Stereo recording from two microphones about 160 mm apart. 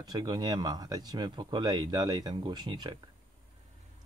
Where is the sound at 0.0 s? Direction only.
25° right (ahead or behind).